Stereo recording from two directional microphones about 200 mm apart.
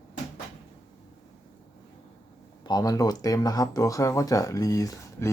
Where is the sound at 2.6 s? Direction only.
20° left (ahead or behind).